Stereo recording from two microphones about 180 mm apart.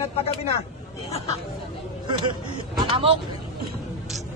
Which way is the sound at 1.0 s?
35° left (ahead or behind).